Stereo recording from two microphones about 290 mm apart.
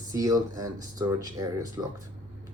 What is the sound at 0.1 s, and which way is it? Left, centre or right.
A man's voice, centre.